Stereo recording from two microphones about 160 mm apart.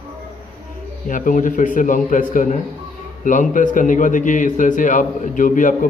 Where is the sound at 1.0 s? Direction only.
55° left (ahead or behind).